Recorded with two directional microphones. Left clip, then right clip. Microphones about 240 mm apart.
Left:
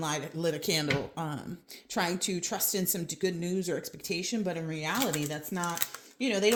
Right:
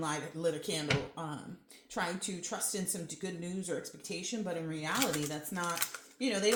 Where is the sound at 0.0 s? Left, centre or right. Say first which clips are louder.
Left 3 dB; left.